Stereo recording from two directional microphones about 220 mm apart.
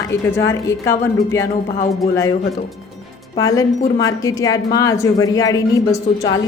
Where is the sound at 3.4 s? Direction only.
15° left (ahead or behind).